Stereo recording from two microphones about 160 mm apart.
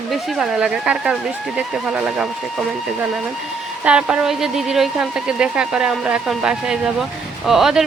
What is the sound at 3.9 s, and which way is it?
A woman's voice, 5° right (ahead or behind).